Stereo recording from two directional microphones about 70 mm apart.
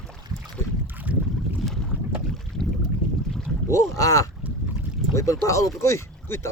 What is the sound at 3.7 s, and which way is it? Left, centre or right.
Speech, left.